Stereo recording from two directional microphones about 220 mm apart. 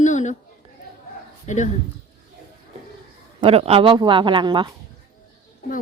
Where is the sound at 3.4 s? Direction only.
25° right (ahead or behind).